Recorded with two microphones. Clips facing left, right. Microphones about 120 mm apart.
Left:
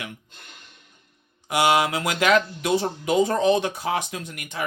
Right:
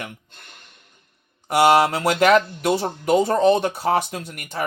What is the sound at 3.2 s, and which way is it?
Speech, 40° right (ahead or behind).